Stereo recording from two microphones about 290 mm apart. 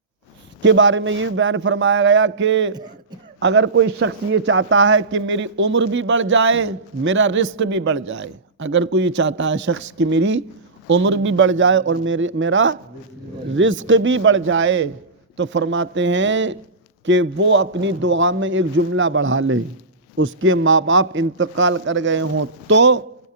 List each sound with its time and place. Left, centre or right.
0.6 s a man's voice: right